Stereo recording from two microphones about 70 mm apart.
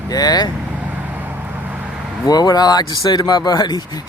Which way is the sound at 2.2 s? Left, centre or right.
Left.